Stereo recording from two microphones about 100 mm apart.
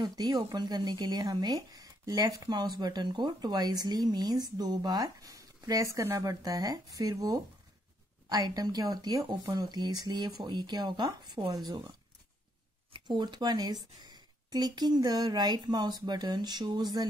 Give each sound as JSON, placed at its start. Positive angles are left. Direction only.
{"t": 0.0, "sound": "a woman's voice", "side_deg": -45}
{"t": 12.9, "sound": "a woman's voice", "side_deg": -50}